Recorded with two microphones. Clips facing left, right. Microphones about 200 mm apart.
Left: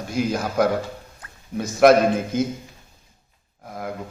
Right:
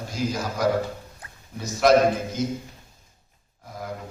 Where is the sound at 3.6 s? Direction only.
55° left (ahead or behind).